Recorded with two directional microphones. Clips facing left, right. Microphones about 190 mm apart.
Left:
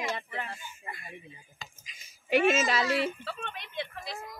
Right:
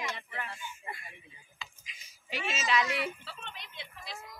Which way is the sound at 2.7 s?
30° left (ahead or behind).